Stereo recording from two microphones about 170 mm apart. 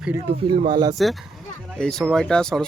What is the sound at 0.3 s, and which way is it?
Speech, 30° right (ahead or behind).